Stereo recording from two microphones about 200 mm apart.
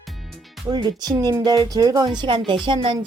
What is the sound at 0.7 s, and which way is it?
Speech, 20° right (ahead or behind).